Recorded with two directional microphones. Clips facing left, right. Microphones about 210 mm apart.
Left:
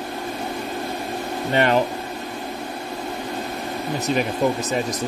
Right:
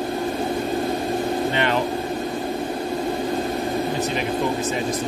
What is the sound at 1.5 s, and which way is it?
Speech, 45° left (ahead or behind).